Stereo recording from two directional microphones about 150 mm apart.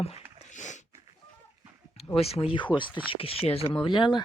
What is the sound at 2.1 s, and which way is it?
Speech, 40° left (ahead or behind).